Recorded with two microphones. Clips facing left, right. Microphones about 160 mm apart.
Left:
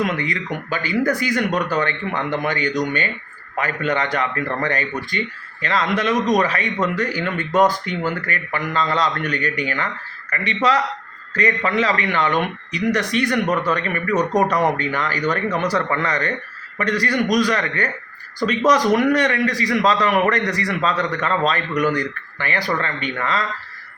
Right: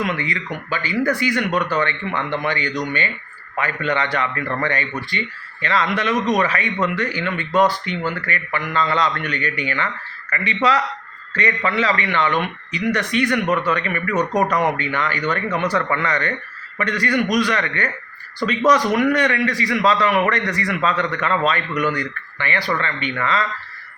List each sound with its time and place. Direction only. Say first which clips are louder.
0.0 s speech: left 2 dB; 45° left (ahead or behind)